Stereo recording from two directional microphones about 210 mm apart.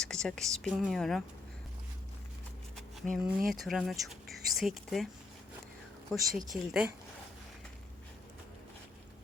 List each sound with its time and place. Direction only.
0.0 s speech: 5° left (ahead or behind)
2.7 s speech: centre (ahead or behind)
6.1 s speech: centre (ahead or behind)